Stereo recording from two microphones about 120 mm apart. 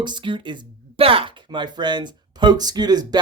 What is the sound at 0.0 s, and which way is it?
Speech, 40° right (ahead or behind).